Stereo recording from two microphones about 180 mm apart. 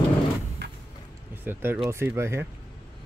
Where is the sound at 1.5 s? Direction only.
10° right (ahead or behind).